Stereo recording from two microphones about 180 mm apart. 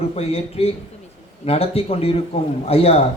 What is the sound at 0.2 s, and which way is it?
A man's voice, 35° left (ahead or behind).